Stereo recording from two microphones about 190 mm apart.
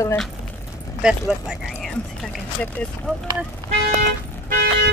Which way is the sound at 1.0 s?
5° right (ahead or behind).